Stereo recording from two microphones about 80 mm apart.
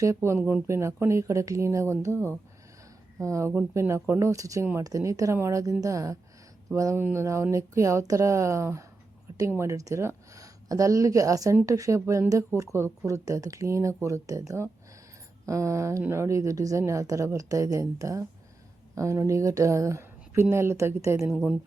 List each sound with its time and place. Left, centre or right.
0.0 s a woman's voice: right
21.2 s a woman's voice: centre